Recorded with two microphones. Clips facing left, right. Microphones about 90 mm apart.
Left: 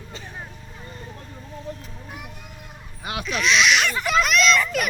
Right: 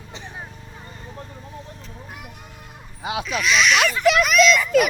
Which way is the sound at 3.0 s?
20° right (ahead or behind).